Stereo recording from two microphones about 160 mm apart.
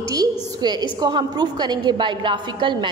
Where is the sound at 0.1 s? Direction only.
25° right (ahead or behind).